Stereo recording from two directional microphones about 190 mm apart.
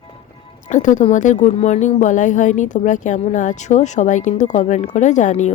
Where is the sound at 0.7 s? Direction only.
40° left (ahead or behind).